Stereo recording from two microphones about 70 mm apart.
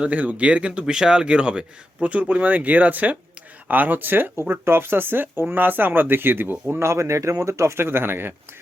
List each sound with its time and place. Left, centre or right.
0.0 s speech: right
6.8 s speech: right